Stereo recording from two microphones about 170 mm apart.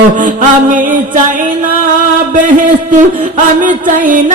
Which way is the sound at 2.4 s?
50° right (ahead or behind).